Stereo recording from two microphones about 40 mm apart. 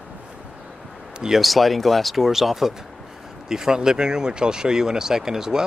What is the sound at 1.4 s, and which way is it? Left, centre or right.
A man's voice, centre.